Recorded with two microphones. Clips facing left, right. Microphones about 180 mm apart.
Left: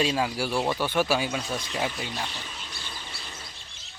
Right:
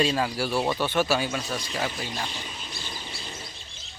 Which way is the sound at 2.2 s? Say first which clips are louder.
Right 1 dB; 15° right (ahead or behind).